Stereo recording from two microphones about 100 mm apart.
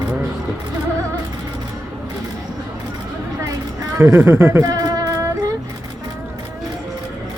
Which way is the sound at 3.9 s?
30° right (ahead or behind).